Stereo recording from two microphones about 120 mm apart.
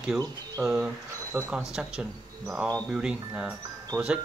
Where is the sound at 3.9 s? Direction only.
5° left (ahead or behind).